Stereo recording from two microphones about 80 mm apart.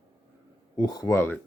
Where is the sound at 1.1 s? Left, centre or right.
Left.